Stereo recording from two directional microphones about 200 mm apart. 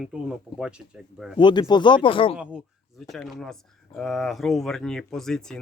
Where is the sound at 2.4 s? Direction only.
5° right (ahead or behind).